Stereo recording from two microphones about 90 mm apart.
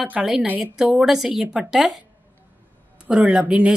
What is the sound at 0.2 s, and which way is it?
Speech, 5° right (ahead or behind).